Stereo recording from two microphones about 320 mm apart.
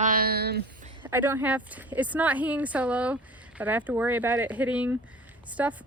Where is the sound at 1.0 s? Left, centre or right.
Centre.